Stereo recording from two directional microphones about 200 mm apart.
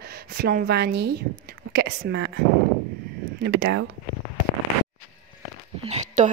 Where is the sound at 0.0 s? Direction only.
50° right (ahead or behind).